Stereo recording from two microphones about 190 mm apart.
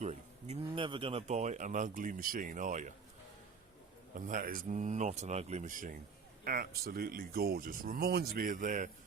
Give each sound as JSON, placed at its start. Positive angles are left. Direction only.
{"t": 0.0, "sound": "speech", "side_deg": -35}
{"t": 4.1, "sound": "speech", "side_deg": -45}